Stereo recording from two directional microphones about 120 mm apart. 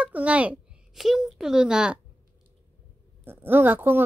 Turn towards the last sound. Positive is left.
turn(degrees=-20)  # may be behind; listen again after turning